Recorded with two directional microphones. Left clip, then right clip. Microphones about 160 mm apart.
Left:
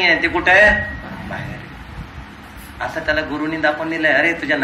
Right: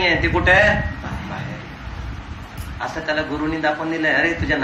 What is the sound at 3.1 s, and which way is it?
A man's voice, 25° left (ahead or behind).